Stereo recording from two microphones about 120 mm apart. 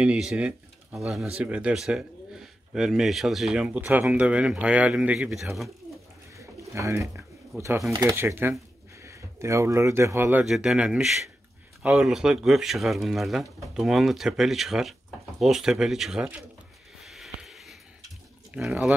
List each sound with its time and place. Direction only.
0.0 s speech: 10° right (ahead or behind)
6.3 s bird: 25° right (ahead or behind)
8.1 s speech: 20° right (ahead or behind)
10.4 s speech: 5° right (ahead or behind)
17.0 s a sound: centre (ahead or behind)
18.6 s speech: centre (ahead or behind)